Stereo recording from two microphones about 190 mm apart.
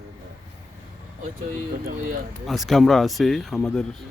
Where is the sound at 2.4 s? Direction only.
Centre (ahead or behind).